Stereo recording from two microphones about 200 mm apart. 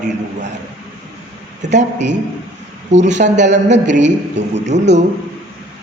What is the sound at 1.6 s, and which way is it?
Speech, 35° right (ahead or behind).